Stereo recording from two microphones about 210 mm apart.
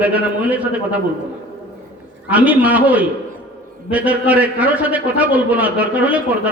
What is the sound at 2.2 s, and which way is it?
A man's voice, 5° right (ahead or behind).